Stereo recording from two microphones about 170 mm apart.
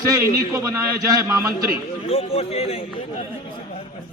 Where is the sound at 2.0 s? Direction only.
35° left (ahead or behind).